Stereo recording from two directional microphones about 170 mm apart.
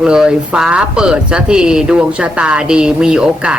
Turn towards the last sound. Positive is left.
turn(degrees=-5)  # may be behind; listen again after turning